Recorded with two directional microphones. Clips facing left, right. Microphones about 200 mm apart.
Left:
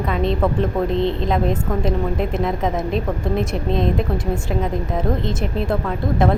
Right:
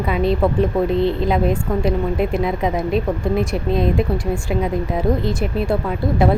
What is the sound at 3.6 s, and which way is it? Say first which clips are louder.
A woman's voice: right 2 dB; 5° right (ahead or behind).